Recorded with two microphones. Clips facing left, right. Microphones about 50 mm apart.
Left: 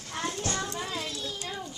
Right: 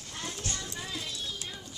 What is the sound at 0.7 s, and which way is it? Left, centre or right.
Children playing, left.